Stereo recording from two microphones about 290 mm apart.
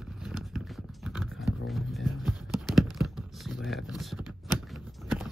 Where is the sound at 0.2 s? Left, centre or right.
Centre.